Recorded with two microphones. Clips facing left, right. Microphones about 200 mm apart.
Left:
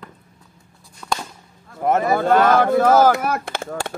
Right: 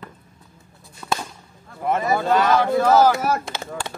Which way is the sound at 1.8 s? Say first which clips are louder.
Left 3 dB; 50° left (ahead or behind).